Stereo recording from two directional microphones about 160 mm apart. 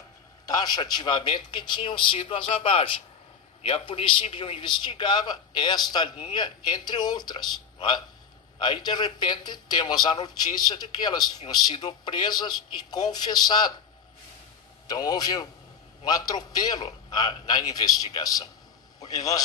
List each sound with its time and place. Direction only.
0.5 s a man's voice: 25° left (ahead or behind)
14.9 s a man's voice: 25° left (ahead or behind)